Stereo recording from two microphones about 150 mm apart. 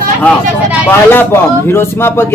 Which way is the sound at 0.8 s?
15° left (ahead or behind).